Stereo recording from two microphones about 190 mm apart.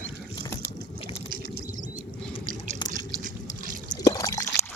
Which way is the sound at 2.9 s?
45° right (ahead or behind).